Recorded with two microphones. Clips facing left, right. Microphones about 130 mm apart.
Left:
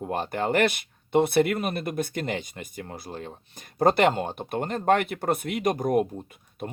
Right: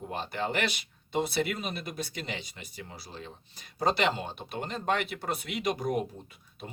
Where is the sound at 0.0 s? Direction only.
50° left (ahead or behind).